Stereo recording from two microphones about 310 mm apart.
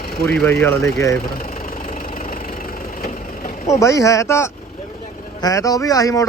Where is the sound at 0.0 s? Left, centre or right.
Left.